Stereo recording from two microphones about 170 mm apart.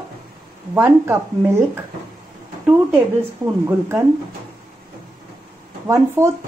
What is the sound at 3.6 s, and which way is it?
Speech, 15° right (ahead or behind).